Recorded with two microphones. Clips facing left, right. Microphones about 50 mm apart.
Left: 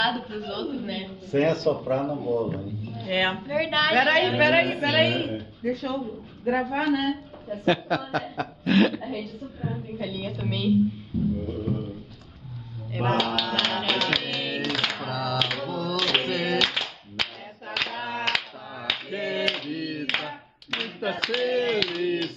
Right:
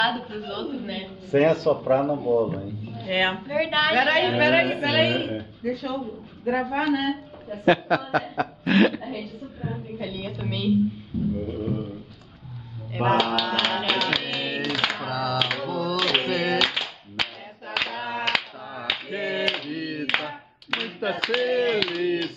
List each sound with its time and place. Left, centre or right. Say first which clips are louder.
0.0 s a man's voice: right 1 dB; centre
7.6 s speech: right 4 dB; centre
8.0 s a man's voice: right 4 dB; centre
11.3 s music: right 1 dB; centre
13.1 s music: right 3 dB; centre
16.0 s a sound: right 1 dB; centre
16.5 s clapping: right 1 dB; centre
21.3 s speech: right 2 dB; centre